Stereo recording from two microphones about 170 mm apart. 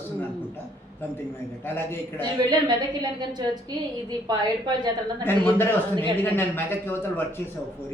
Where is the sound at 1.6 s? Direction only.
15° left (ahead or behind).